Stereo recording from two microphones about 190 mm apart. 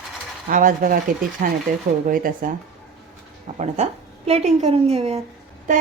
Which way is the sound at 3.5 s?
35° right (ahead or behind).